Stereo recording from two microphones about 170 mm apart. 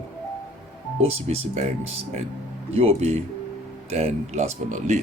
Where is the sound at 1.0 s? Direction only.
40° right (ahead or behind).